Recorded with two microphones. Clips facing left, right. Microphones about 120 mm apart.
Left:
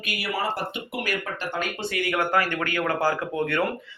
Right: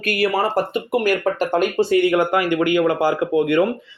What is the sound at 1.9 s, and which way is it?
Speech, 25° right (ahead or behind).